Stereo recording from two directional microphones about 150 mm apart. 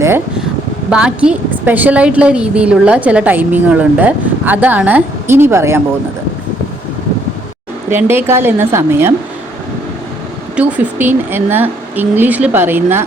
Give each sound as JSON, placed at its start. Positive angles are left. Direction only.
{"t": 0.9, "sound": "a woman's voice", "side_deg": -5}
{"t": 7.9, "sound": "a woman's voice", "side_deg": -15}
{"t": 10.5, "sound": "a woman's voice", "side_deg": -10}